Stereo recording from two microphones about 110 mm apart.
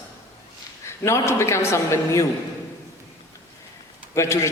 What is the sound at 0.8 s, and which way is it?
Speech, 25° left (ahead or behind).